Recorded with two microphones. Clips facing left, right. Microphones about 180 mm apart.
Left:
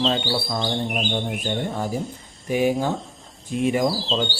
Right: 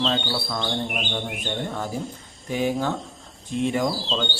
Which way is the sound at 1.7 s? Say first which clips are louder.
Left 3 dB; 15° left (ahead or behind).